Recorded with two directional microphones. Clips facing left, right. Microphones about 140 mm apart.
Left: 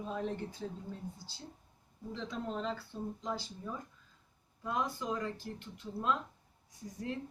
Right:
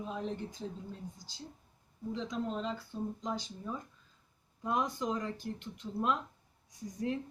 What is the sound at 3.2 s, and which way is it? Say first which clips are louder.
Speech: right 1 dB; 20° right (ahead or behind).